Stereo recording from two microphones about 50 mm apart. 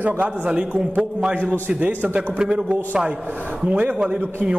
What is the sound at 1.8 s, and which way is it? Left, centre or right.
Speech, right.